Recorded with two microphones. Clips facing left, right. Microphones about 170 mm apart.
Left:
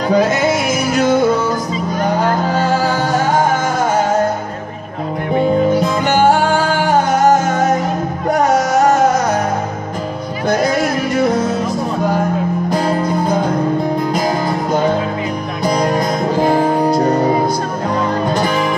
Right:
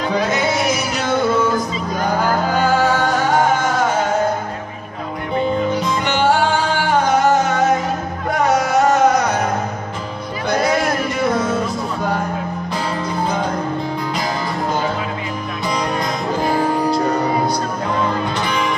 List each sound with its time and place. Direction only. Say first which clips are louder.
0.1 s music: left 7 dB; 45° left (ahead or behind)
5.7 s music: left 5 dB; 45° left (ahead or behind)
12.6 s music: left 7 dB; 45° left (ahead or behind)
15.6 s music: left 6 dB; 40° left (ahead or behind)
18.3 s music: left 5 dB; 45° left (ahead or behind)